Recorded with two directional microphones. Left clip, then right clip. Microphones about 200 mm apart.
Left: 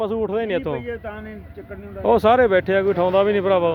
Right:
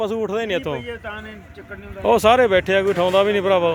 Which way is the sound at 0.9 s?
35° left (ahead or behind).